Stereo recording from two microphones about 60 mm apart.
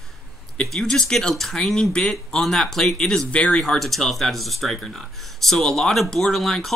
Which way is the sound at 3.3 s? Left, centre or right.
Left.